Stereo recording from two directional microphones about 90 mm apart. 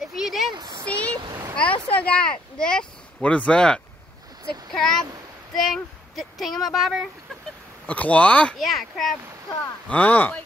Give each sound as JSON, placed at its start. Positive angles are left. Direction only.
{"t": 0.0, "sound": "a sound", "side_deg": -5}
{"t": 0.5, "sound": "a sound", "side_deg": -50}
{"t": 0.8, "sound": "vehicle", "side_deg": 15}
{"t": 1.2, "sound": "vehicle", "side_deg": -50}
{"t": 1.5, "sound": "speech", "side_deg": 15}
{"t": 7.8, "sound": "speech", "side_deg": 15}
{"t": 8.5, "sound": "speech", "side_deg": 0}
{"t": 9.8, "sound": "speech", "side_deg": 15}